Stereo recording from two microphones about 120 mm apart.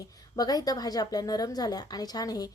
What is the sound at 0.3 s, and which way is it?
A woman's voice, 30° left (ahead or behind).